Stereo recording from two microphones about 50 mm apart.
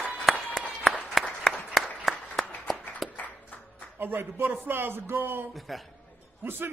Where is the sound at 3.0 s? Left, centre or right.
Centre.